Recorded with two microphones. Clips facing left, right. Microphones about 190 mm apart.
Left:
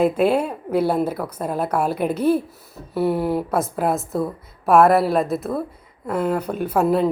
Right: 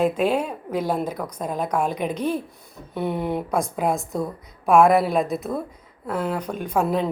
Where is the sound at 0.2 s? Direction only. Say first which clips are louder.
Left 3 dB; 10° left (ahead or behind).